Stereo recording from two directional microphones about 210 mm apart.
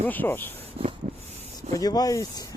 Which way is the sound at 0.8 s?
25° right (ahead or behind).